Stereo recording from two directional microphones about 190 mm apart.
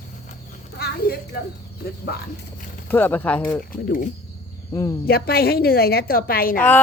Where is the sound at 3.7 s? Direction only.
45° left (ahead or behind).